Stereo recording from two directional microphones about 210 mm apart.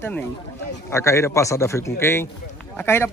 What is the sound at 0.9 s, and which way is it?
Speech, 15° left (ahead or behind).